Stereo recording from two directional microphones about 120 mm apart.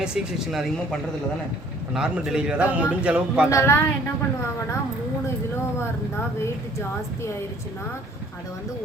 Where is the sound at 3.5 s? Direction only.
20° left (ahead or behind).